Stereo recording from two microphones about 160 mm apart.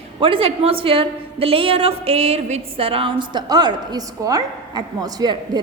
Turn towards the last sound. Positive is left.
turn(degrees=-25)  # may be behind; listen again after turning